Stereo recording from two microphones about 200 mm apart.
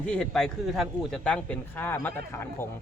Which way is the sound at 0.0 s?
5° left (ahead or behind).